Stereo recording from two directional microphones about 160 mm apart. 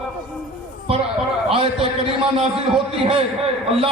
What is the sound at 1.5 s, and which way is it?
Speech, 35° right (ahead or behind).